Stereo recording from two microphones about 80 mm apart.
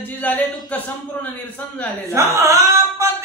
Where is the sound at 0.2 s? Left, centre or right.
Left.